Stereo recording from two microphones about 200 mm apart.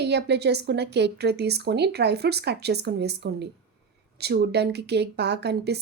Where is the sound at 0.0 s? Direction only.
55° right (ahead or behind).